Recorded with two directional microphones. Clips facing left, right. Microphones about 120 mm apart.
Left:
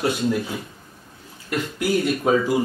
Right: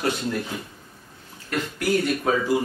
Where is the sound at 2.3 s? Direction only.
20° left (ahead or behind).